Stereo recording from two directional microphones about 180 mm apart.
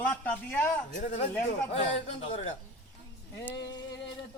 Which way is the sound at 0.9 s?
40° left (ahead or behind).